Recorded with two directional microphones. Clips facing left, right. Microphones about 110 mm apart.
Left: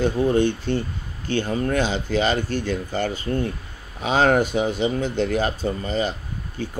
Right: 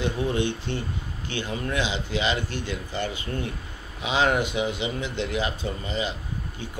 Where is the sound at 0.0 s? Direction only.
45° left (ahead or behind).